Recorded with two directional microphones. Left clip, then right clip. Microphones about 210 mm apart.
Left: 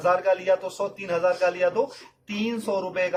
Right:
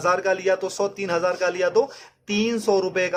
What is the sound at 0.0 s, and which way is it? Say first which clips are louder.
A man's voice: right 1 dB; 50° right (ahead or behind).